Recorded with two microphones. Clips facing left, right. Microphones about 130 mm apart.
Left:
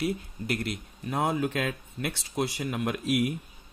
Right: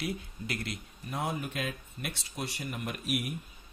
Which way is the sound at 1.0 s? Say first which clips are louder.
Left 7 dB; 90° left.